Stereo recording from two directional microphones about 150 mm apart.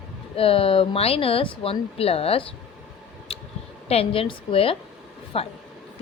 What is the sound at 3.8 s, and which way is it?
A woman's voice, 40° left (ahead or behind).